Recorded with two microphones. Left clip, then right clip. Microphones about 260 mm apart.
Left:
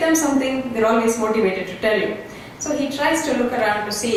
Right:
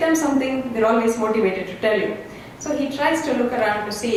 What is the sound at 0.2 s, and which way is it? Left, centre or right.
A woman's voice, centre.